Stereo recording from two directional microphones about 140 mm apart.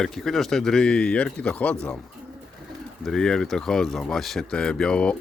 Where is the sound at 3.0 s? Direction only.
5° left (ahead or behind).